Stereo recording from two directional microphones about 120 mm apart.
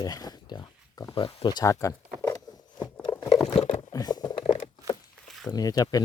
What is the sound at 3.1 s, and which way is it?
Crunch, 25° left (ahead or behind).